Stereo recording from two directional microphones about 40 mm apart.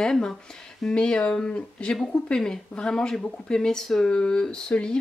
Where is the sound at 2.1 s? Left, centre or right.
Centre.